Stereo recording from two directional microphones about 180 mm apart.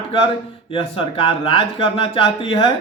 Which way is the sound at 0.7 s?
30° left (ahead or behind).